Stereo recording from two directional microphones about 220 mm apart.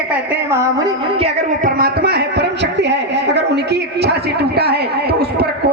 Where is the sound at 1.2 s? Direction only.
40° right (ahead or behind).